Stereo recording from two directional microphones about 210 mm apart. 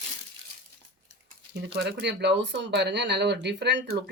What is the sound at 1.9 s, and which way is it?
Speech, 55° right (ahead or behind).